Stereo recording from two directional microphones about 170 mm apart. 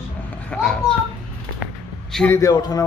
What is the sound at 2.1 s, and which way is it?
Speech, 15° left (ahead or behind).